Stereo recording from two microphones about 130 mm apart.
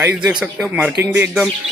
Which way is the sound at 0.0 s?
10° right (ahead or behind).